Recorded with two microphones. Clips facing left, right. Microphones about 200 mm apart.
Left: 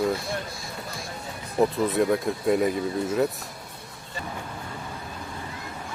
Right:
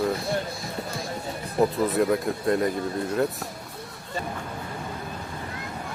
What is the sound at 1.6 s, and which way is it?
Speech, centre (ahead or behind).